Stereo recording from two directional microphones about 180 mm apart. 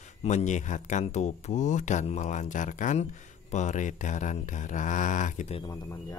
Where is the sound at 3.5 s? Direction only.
40° left (ahead or behind).